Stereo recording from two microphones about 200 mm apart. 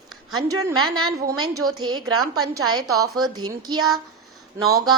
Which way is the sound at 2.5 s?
90° right.